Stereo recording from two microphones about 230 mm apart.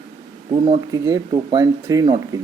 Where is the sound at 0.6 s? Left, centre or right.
Centre.